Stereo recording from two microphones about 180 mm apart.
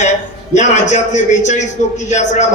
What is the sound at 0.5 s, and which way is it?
A man's voice, 40° left (ahead or behind).